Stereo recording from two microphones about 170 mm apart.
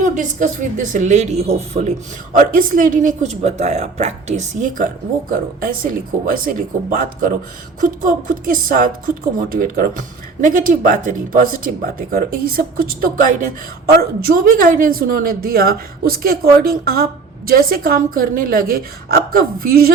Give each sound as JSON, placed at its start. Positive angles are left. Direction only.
{"t": 0.0, "sound": "speech", "side_deg": -50}
{"t": 2.5, "sound": "speech", "side_deg": -55}
{"t": 5.3, "sound": "a woman's voice", "side_deg": -60}